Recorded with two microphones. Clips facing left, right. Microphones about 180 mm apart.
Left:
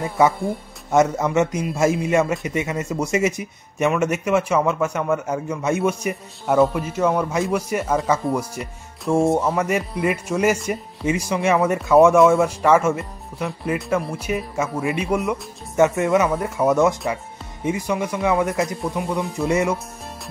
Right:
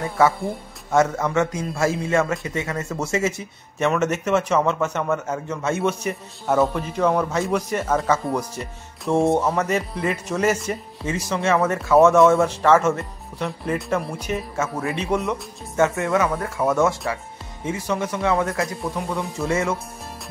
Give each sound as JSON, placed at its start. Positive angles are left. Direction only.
{"t": 0.2, "sound": "a man's voice", "side_deg": 15}
{"t": 12.2, "sound": "a man's voice", "side_deg": 0}
{"t": 12.4, "sound": "a man's voice", "side_deg": 10}
{"t": 16.0, "sound": "a man's voice", "side_deg": 20}